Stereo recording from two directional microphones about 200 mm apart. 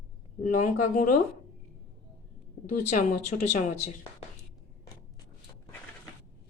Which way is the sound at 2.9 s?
35° left (ahead or behind).